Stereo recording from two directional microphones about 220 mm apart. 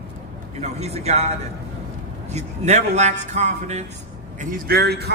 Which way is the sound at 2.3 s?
30° right (ahead or behind).